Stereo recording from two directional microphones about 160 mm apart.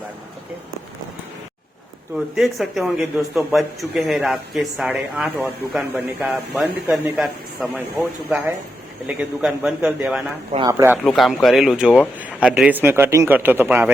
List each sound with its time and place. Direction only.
2.1 s a man's voice: centre (ahead or behind)
10.6 s a man's voice: 20° right (ahead or behind)
11.0 s a man's voice: centre (ahead or behind)